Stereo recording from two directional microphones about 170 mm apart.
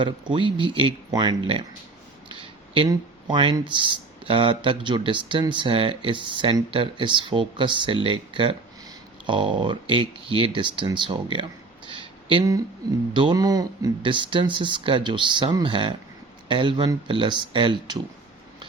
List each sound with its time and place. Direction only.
0.0 s speech: 30° right (ahead or behind)
11.9 s a sound: 30° right (ahead or behind)
13.1 s speech: 25° right (ahead or behind)